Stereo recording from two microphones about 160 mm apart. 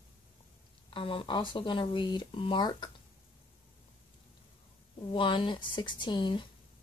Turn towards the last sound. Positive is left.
turn(degrees=30)  # may be behind; listen again after turning